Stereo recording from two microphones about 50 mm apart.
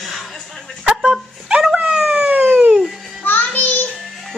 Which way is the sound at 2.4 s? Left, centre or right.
Right.